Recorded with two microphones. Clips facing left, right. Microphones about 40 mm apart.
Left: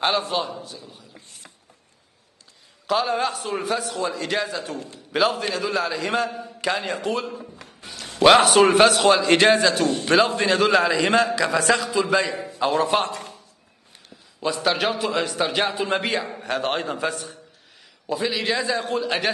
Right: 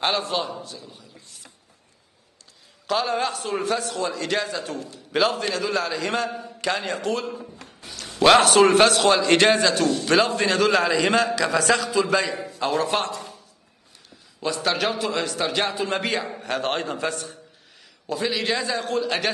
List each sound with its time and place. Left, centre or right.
0.0 s a man's voice: centre
2.9 s a man's voice: centre
4.7 s a man's voice: left
5.1 s a man's voice: centre
7.8 s music: centre
8.2 s a man's voice: centre
13.1 s a sound: left
14.4 s a man's voice: centre